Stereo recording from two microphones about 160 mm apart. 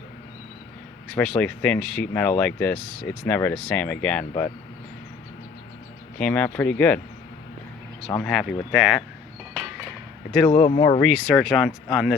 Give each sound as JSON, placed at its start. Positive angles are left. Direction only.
{"t": 1.0, "sound": "speech", "side_deg": 5}
{"t": 6.1, "sound": "speech", "side_deg": 10}
{"t": 8.2, "sound": "speech", "side_deg": 5}
{"t": 10.5, "sound": "speech", "side_deg": 45}
{"t": 10.8, "sound": "speech", "side_deg": 25}
{"t": 11.1, "sound": "speech", "side_deg": 0}